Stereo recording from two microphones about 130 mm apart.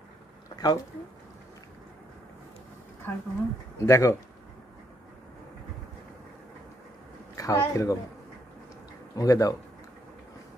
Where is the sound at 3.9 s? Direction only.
25° left (ahead or behind).